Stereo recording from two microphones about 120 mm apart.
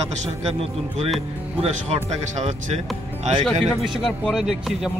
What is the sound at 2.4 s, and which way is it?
Speech, 75° right (ahead or behind).